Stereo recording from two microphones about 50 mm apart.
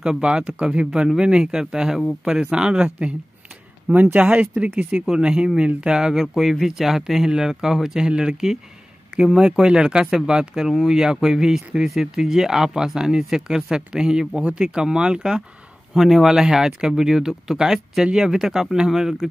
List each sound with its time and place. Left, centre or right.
0.0 s speech: centre
3.9 s speech: right
5.0 s speech: centre